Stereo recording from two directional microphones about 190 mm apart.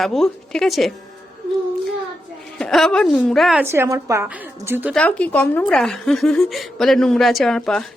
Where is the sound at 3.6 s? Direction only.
15° right (ahead or behind).